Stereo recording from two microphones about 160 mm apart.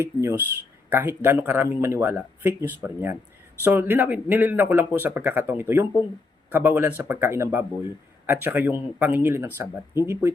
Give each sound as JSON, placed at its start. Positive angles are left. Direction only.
{"t": 0.0, "sound": "speech", "side_deg": -15}